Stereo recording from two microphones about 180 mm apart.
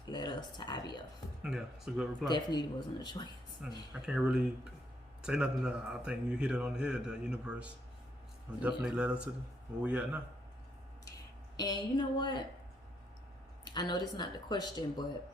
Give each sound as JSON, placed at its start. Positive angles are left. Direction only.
{"t": 0.0, "sound": "a sound", "side_deg": 25}
{"t": 1.4, "sound": "speech", "side_deg": -5}
{"t": 2.2, "sound": "speech", "side_deg": 25}
{"t": 3.6, "sound": "speech", "side_deg": -5}
{"t": 11.5, "sound": "speech", "side_deg": 20}
{"t": 13.7, "sound": "speech", "side_deg": 25}